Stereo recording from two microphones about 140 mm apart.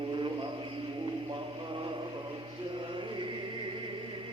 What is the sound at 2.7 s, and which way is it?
Chant, 35° right (ahead or behind).